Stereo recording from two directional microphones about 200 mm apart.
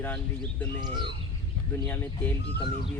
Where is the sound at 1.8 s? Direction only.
10° left (ahead or behind).